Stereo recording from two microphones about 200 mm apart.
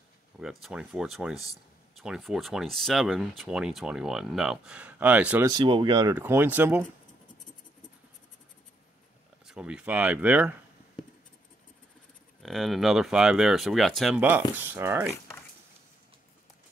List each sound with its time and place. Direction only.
0.4 s speech: centre (ahead or behind)
5.5 s speech: 25° right (ahead or behind)
6.1 s speech: 10° right (ahead or behind)
9.5 s speech: 5° right (ahead or behind)
12.4 s speech: centre (ahead or behind)